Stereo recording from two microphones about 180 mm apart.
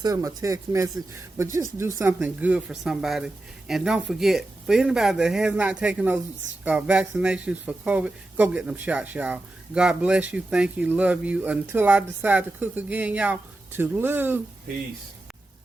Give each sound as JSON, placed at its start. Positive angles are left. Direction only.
{"t": 0.0, "sound": "speech", "side_deg": -20}